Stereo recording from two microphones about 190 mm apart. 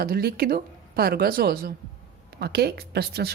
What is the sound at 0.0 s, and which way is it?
Speech, 55° right (ahead or behind).